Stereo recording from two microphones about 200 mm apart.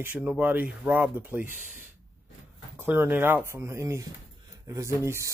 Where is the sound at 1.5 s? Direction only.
40° left (ahead or behind).